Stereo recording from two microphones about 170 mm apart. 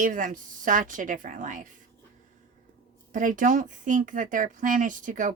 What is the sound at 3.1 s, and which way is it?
Speech, 50° right (ahead or behind).